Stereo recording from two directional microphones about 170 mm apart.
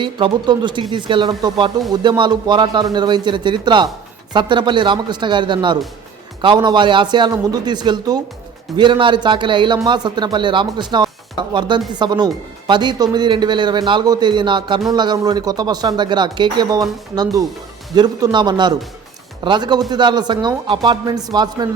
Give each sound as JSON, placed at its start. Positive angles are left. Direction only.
{"t": 0.0, "sound": "speech", "side_deg": -25}
{"t": 17.9, "sound": "speech", "side_deg": -25}